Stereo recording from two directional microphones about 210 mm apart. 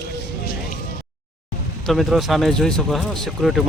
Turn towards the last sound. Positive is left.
turn(degrees=0)  # may be behind; listen again after turning